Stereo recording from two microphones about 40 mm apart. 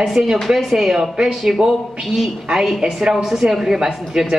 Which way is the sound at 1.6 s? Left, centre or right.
Centre.